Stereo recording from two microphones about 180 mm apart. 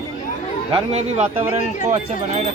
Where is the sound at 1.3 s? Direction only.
35° right (ahead or behind).